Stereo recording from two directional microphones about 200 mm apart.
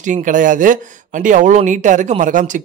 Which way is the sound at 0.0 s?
40° right (ahead or behind).